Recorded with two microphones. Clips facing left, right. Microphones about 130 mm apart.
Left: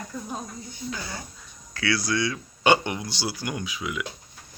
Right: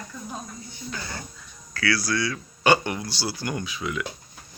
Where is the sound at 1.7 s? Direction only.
20° left (ahead or behind).